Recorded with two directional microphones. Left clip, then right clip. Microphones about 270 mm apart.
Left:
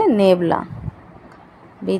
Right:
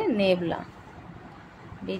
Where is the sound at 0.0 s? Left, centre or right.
Left.